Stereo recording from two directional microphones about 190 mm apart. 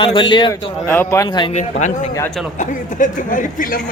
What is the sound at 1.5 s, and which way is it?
Speech, 35° left (ahead or behind).